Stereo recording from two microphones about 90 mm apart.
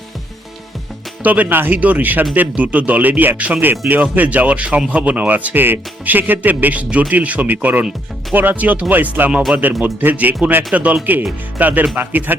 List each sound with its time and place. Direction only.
1.2 s speech: 20° right (ahead or behind)
9.3 s speech: 10° right (ahead or behind)